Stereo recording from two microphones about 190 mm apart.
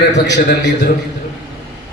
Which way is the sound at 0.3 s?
65° left (ahead or behind).